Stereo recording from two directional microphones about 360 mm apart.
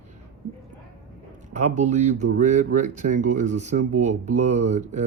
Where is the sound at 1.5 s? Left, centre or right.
Centre.